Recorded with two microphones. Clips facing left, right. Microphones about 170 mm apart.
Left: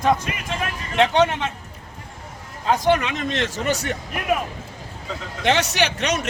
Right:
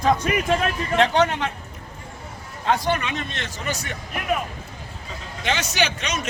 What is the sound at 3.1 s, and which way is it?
Speech, 90° left.